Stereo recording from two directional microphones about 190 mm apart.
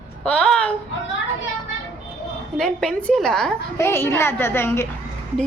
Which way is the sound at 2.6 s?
5° left (ahead or behind).